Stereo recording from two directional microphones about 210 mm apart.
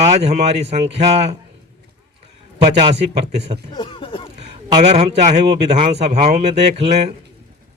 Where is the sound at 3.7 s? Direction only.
20° left (ahead or behind).